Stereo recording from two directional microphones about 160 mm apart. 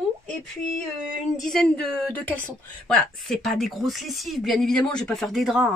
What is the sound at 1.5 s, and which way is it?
Speech, 5° left (ahead or behind).